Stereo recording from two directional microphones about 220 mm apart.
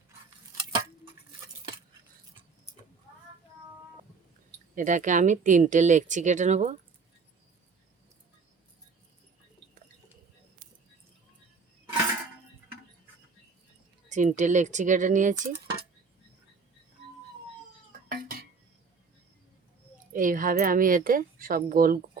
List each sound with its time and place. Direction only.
4.7 s speech: 35° right (ahead or behind)
14.1 s speech: 35° right (ahead or behind)
18.1 s a sound: 45° right (ahead or behind)
20.1 s speech: 35° right (ahead or behind)